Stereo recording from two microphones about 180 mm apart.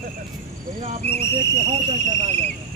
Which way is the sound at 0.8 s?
35° right (ahead or behind).